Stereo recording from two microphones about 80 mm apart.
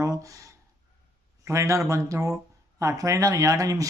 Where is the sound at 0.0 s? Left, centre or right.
Right.